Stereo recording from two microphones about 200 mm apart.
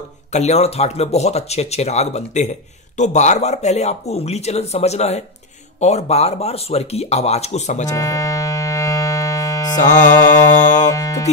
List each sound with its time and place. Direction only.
0.3 s speech: 35° left (ahead or behind)
7.9 s music: 15° left (ahead or behind)
9.8 s speech: 40° left (ahead or behind)
10.9 s music: 15° left (ahead or behind)